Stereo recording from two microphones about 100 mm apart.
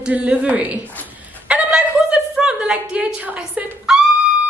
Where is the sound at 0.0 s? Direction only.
10° right (ahead or behind).